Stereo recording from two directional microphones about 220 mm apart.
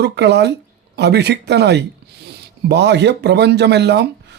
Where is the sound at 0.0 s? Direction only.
50° right (ahead or behind).